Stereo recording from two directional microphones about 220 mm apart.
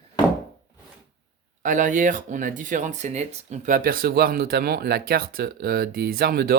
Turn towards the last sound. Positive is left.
turn(degrees=-45)  # may be behind; listen again after turning